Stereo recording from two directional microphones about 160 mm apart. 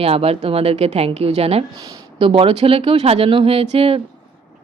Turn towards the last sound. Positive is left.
turn(degrees=-40)  # may be behind; listen again after turning